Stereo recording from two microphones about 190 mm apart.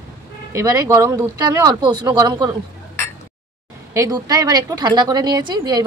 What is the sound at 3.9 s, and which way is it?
Speech, 20° right (ahead or behind).